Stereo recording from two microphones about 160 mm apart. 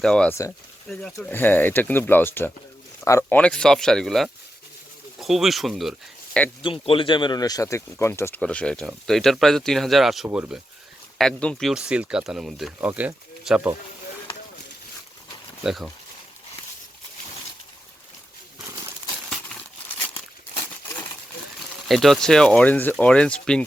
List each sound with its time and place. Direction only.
0.0 s speech: 5° left (ahead or behind)
6.6 s speech: 35° left (ahead or behind); by 10.6 s 10° right (ahead or behind)
11.2 s speech: 5° left (ahead or behind)
15.6 s speech: 5° right (ahead or behind)
20.6 s crumpling: 15° left (ahead or behind)
21.8 s speech: centre (ahead or behind)